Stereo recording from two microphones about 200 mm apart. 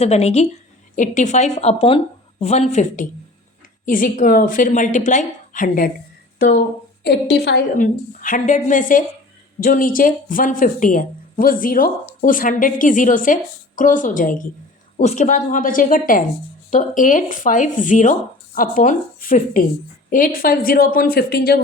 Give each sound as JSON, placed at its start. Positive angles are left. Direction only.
{"t": 0.0, "sound": "speech", "side_deg": 30}
{"t": 7.0, "sound": "a woman's voice", "side_deg": 55}
{"t": 7.8, "sound": "a woman's voice", "side_deg": 40}